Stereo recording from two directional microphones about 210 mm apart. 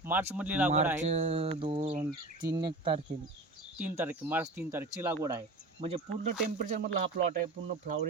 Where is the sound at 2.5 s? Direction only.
20° right (ahead or behind).